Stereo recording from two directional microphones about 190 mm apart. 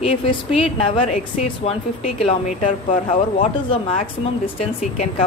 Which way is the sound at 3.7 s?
30° left (ahead or behind).